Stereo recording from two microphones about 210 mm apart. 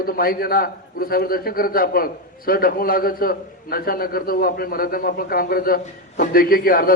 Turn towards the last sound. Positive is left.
turn(degrees=45)  # may be behind; listen again after turning